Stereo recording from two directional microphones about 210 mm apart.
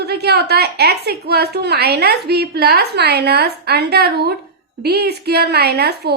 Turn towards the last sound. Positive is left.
turn(degrees=-50)  # may be behind; listen again after turning